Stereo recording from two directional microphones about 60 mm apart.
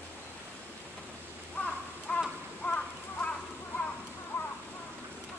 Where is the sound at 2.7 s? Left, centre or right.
Left.